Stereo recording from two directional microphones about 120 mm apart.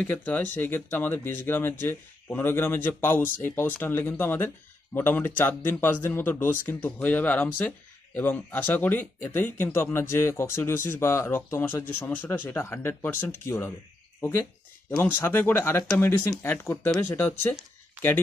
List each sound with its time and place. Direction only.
0.0 s speech: 15° left (ahead or behind)
14.9 s speech: 20° left (ahead or behind)